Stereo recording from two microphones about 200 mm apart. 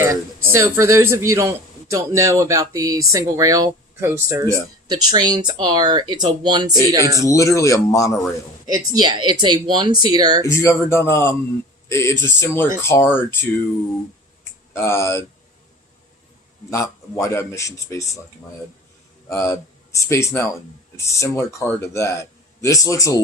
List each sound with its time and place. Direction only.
0.0 s a man's voice: 15° right (ahead or behind)
7.3 s speech: 15° left (ahead or behind)
8.6 s speech: 20° right (ahead or behind)
10.4 s speech: 15° left (ahead or behind)
14.7 s speech: 10° left (ahead or behind)
16.6 s speech: 15° left (ahead or behind)
19.3 s speech: 15° left (ahead or behind)